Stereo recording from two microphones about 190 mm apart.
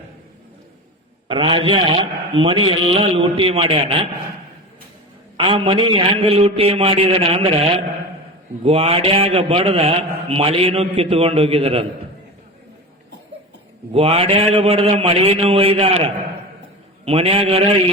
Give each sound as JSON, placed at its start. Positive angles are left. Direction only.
{"t": 1.3, "sound": "a man's voice", "side_deg": -25}
{"t": 5.4, "sound": "a man's voice", "side_deg": -25}
{"t": 8.6, "sound": "a man's voice", "side_deg": -30}
{"t": 13.9, "sound": "a man's voice", "side_deg": -30}
{"t": 17.1, "sound": "a man's voice", "side_deg": -30}